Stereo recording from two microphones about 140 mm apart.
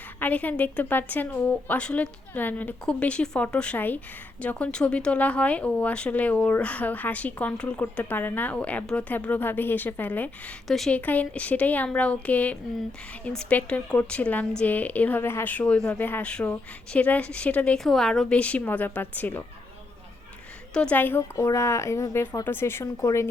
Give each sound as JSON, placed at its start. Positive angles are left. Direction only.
{"t": 0.2, "sound": "a woman's voice", "side_deg": 10}
{"t": 20.7, "sound": "a woman's voice", "side_deg": 10}